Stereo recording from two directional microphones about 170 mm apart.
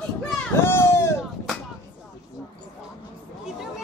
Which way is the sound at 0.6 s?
15° left (ahead or behind).